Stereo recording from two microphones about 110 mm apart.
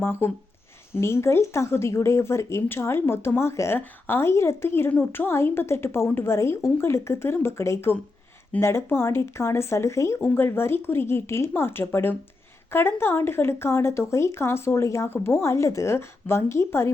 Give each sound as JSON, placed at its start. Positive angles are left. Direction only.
{"t": 0.0, "sound": "speech", "side_deg": 20}